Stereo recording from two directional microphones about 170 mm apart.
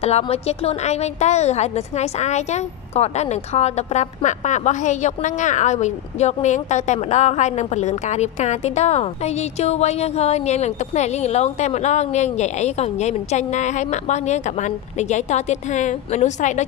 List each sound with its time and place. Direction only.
0.0 s a woman's voice: 40° left (ahead or behind)